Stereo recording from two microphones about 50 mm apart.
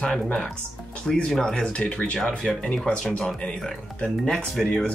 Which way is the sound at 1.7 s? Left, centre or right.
Left.